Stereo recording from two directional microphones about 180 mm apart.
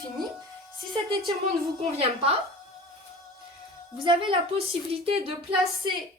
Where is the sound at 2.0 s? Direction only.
35° right (ahead or behind).